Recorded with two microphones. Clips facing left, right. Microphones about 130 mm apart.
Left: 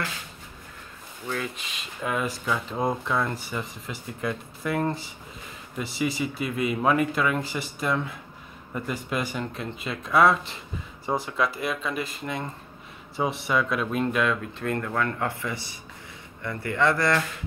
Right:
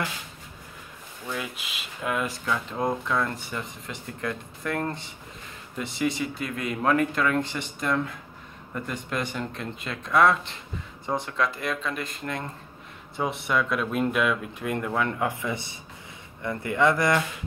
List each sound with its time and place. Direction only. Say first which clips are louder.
1.3 s speech: left 2 dB; 5° right (ahead or behind)